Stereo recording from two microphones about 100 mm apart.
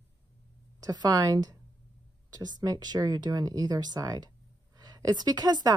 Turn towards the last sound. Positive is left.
turn(degrees=-40)  # may be behind; listen again after turning